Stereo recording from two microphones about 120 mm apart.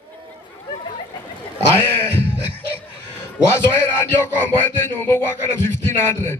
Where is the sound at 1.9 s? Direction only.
15° left (ahead or behind).